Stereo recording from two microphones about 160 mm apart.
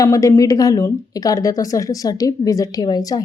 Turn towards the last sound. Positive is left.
turn(degrees=25)  # may be behind; listen again after turning